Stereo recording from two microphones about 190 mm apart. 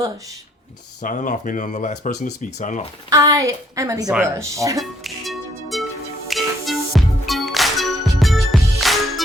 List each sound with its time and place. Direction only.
1.0 s speech: 45° left (ahead or behind)
3.1 s a woman's voice: 20° right (ahead or behind)
4.8 s music: centre (ahead or behind)